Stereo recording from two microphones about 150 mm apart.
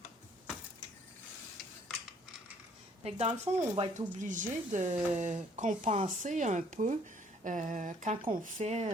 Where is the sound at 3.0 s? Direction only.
45° right (ahead or behind).